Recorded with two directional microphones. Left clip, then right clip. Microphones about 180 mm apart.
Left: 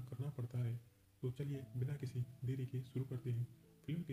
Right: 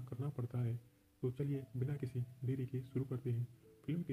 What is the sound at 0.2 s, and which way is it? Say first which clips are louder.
Speech: right 4 dB; 20° right (ahead or behind).